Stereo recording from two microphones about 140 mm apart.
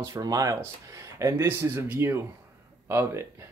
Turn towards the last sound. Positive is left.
turn(degrees=-20)  # may be behind; listen again after turning